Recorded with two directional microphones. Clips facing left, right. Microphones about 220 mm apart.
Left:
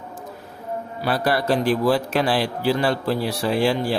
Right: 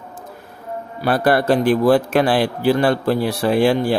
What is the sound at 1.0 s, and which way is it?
A man's voice, 55° right (ahead or behind).